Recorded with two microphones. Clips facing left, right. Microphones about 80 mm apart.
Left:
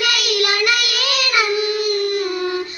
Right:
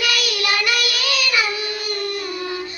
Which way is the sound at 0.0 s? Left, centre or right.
Left.